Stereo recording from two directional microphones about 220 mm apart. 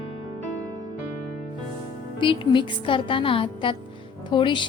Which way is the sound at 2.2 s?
20° left (ahead or behind).